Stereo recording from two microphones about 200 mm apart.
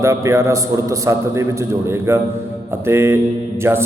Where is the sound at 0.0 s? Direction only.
15° right (ahead or behind).